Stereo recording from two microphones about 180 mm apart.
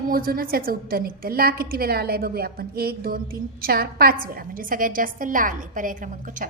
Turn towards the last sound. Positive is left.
turn(degrees=-45)  # may be behind; listen again after turning